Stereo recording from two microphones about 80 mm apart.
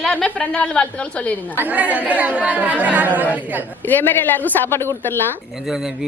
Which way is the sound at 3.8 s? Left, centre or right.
Left.